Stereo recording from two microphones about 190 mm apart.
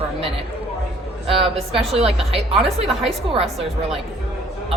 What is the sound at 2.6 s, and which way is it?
Speech, centre (ahead or behind).